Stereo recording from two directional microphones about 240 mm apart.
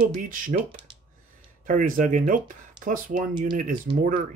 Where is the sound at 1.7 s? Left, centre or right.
Right.